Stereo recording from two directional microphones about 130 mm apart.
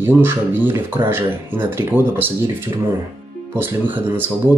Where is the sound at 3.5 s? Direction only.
15° right (ahead or behind).